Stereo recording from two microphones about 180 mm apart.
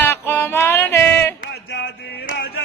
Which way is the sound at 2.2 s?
65° left (ahead or behind).